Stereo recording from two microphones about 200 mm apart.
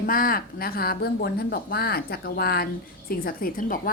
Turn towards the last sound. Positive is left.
turn(degrees=45)  # may be behind; listen again after turning